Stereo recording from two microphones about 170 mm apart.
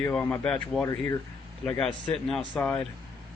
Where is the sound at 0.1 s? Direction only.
5° left (ahead or behind).